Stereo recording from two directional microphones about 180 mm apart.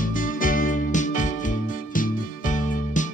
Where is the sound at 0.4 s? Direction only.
50° left (ahead or behind).